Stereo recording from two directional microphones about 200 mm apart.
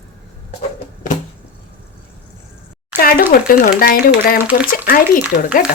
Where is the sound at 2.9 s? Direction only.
50° left (ahead or behind).